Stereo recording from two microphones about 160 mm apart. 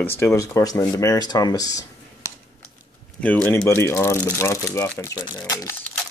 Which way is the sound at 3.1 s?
10° left (ahead or behind).